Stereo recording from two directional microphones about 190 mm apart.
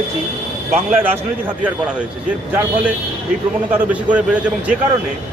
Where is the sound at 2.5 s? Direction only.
10° right (ahead or behind).